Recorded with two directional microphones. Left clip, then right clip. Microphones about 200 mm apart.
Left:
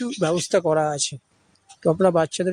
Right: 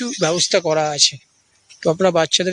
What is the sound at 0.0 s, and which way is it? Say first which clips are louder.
Speech: right 4 dB; 5° right (ahead or behind).